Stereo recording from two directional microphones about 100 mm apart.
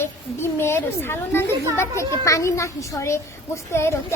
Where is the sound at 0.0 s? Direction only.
25° left (ahead or behind).